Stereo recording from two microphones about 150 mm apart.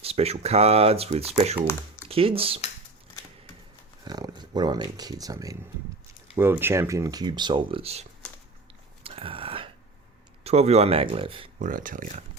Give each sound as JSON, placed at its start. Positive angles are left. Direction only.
{"t": 0.0, "sound": "speech", "side_deg": -40}
{"t": 4.0, "sound": "speech", "side_deg": -25}
{"t": 9.0, "sound": "a sound", "side_deg": -40}
{"t": 10.4, "sound": "speech", "side_deg": -45}
{"t": 11.6, "sound": "speech", "side_deg": -65}